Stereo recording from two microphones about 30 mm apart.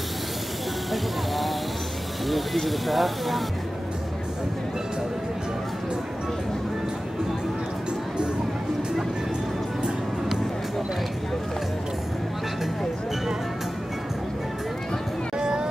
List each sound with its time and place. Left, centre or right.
2.2 s speech: centre
15.3 s music: right